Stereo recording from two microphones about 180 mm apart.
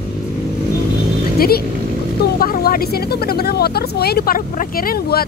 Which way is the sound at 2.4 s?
55° left (ahead or behind).